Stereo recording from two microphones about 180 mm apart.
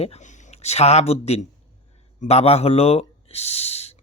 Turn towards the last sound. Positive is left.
turn(degrees=35)  # may be behind; listen again after turning